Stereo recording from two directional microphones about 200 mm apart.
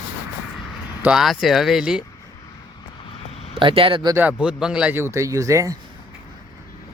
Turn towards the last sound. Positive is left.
turn(degrees=-15)  # may be behind; listen again after turning